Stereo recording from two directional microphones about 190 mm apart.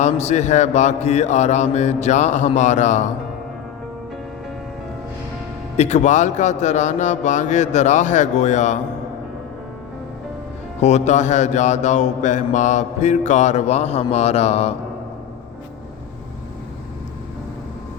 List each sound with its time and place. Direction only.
0.0 s mantra: 35° left (ahead or behind)
5.7 s mantra: 35° left (ahead or behind)
10.8 s mantra: 35° left (ahead or behind)